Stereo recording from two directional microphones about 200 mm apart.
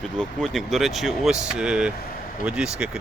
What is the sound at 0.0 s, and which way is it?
Speech, 5° left (ahead or behind).